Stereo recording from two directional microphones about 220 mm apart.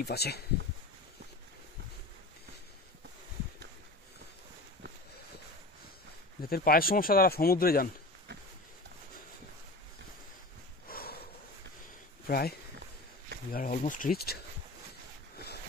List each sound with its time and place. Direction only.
0.0 s speech: 45° left (ahead or behind)
6.4 s speech: 45° left (ahead or behind)
10.9 s snort: 45° left (ahead or behind)
12.3 s speech: 45° left (ahead or behind)
15.3 s boat: 45° left (ahead or behind)